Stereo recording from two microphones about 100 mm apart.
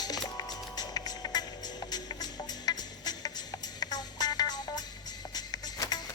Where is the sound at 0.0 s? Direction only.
40° left (ahead or behind).